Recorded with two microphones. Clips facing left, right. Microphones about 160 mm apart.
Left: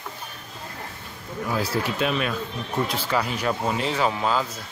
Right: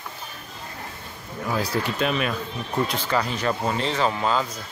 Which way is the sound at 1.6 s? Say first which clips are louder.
Even; 5° left (ahead or behind).